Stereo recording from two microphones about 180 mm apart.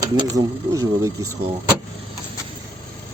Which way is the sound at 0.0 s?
20° right (ahead or behind).